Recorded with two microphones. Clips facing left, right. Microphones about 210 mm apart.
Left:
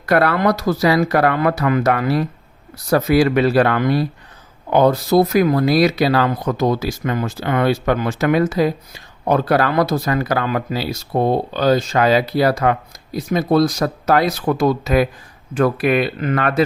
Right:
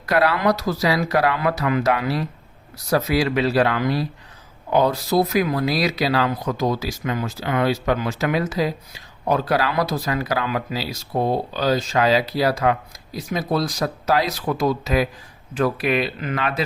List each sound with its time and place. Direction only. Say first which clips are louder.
0.0 s speech: left 3 dB; 55° left (ahead or behind)